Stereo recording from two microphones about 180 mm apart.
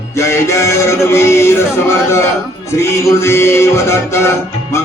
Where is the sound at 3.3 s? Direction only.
15° left (ahead or behind).